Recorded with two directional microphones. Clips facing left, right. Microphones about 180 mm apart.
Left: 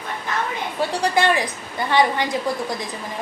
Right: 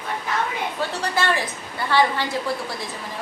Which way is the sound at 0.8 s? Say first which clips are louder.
Left 6 dB; 15° left (ahead or behind).